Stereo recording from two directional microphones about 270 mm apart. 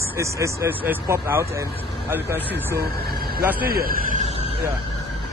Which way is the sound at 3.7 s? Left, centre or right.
Right.